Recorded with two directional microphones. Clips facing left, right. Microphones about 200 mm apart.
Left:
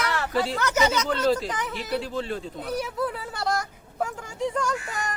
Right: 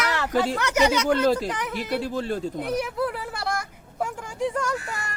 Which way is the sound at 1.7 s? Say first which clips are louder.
Right 2 dB; 45° right (ahead or behind).